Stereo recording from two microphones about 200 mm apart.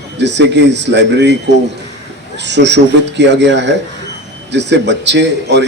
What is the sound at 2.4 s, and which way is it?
A man's voice, 60° right (ahead or behind).